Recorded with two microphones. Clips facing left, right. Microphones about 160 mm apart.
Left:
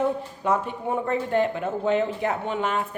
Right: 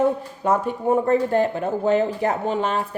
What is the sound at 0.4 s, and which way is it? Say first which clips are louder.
Speech: right 5 dB; 45° right (ahead or behind).